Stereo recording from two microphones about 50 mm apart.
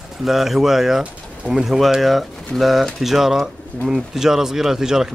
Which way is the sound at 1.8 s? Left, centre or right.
Centre.